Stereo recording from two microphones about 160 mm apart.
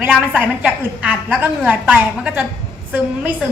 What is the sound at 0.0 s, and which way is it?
A woman's voice, 10° right (ahead or behind).